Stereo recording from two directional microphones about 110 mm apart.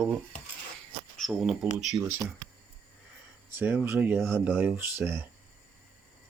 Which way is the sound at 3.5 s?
15° right (ahead or behind).